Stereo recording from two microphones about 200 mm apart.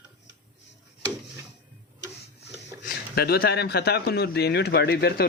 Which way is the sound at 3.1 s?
50° left (ahead or behind).